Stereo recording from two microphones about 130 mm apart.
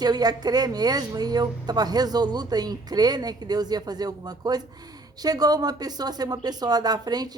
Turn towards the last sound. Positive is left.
turn(degrees=-30)  # may be behind; listen again after turning